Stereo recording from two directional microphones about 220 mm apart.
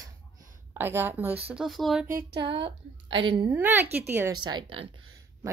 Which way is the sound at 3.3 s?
20° right (ahead or behind).